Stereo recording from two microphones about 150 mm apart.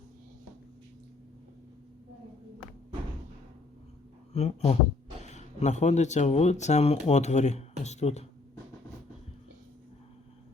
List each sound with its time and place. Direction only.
4.4 s speech: 45° left (ahead or behind)